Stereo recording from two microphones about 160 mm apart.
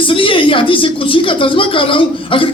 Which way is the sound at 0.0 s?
35° left (ahead or behind).